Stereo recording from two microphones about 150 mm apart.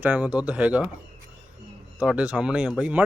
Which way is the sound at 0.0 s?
10° right (ahead or behind).